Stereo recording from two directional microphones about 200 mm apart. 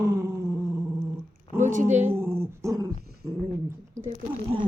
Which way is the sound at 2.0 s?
10° right (ahead or behind).